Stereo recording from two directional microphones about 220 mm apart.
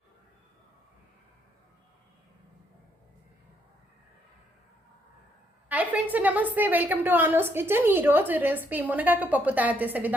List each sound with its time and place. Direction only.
5.6 s a woman's voice: 5° right (ahead or behind)